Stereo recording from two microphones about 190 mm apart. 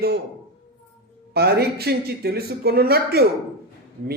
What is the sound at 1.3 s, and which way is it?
Speech, 55° right (ahead or behind).